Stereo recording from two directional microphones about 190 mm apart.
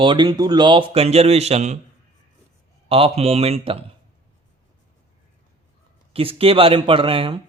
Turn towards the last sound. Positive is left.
turn(degrees=-30)  # may be behind; listen again after turning